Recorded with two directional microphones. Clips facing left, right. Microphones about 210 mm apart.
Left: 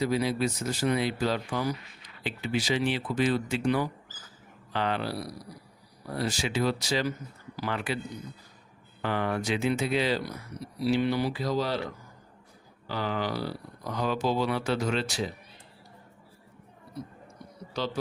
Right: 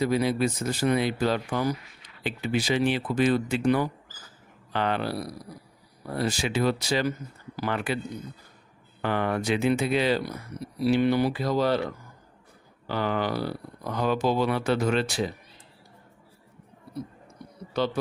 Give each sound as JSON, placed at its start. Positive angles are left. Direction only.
{"t": 0.0, "sound": "speech", "side_deg": -55}
{"t": 9.0, "sound": "speech", "side_deg": -55}
{"t": 12.9, "sound": "speech", "side_deg": -55}
{"t": 17.7, "sound": "speech", "side_deg": -55}